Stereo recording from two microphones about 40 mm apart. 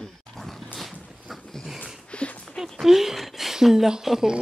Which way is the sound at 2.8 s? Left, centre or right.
Centre.